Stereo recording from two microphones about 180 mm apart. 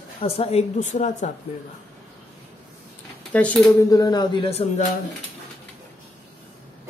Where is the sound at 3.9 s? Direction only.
20° left (ahead or behind).